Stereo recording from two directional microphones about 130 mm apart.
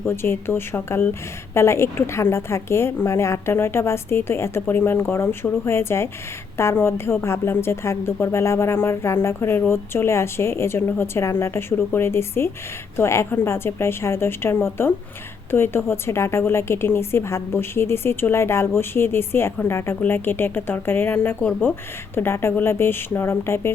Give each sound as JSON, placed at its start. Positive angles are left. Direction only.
{"t": 0.0, "sound": "a woman's voice", "side_deg": 20}